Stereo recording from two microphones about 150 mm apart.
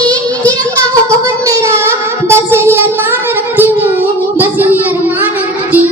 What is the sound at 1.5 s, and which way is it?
Child singing, 20° right (ahead or behind).